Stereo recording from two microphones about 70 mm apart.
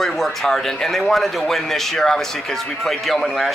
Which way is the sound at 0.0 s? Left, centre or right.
Centre.